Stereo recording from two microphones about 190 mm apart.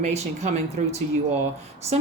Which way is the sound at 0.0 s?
35° right (ahead or behind).